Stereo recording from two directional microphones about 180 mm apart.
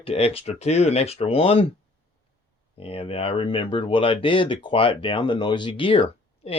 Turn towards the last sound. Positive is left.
turn(degrees=30)  # may be behind; listen again after turning